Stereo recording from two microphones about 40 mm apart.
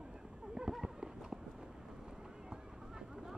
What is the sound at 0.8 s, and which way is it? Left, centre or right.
Run, centre.